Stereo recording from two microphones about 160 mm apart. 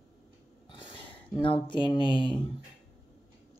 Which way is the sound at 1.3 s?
30° left (ahead or behind).